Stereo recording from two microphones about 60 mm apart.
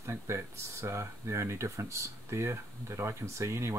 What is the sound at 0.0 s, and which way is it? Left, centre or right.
Speech, right.